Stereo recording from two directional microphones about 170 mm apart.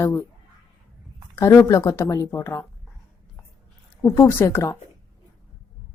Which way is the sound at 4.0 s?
15° left (ahead or behind).